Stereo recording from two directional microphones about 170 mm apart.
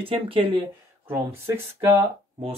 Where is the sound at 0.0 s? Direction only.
30° right (ahead or behind).